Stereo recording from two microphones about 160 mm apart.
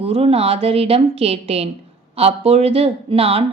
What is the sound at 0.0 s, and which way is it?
Speech, 35° right (ahead or behind).